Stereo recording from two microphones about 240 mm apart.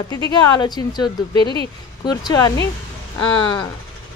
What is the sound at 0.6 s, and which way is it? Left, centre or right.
A woman's voice, centre.